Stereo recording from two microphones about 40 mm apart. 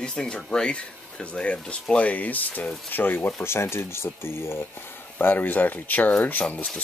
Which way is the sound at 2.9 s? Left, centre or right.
Left.